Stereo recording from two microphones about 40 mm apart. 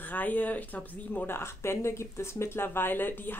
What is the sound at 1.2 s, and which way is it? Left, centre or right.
A woman's voice, left.